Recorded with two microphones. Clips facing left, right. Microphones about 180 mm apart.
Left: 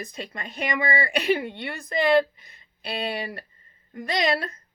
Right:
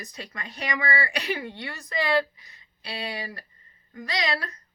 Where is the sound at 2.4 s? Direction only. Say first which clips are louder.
Left 5 dB; 50° left (ahead or behind).